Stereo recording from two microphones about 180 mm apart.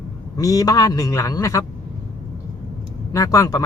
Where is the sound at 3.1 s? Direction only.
20° left (ahead or behind).